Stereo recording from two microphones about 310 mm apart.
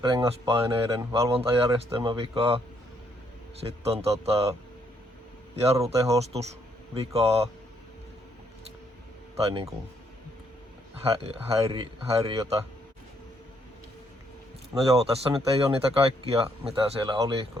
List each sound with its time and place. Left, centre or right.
0.0 s speech: centre
3.6 s speech: centre
5.5 s speech: centre
9.3 s speech: centre
11.1 s speech: centre
14.8 s speech: centre